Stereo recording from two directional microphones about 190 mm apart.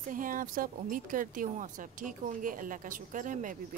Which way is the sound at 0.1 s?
45° right (ahead or behind).